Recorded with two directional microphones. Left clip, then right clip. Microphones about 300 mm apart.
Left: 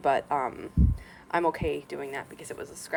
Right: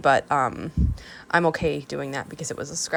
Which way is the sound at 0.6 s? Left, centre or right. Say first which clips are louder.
Right 2 dB; right.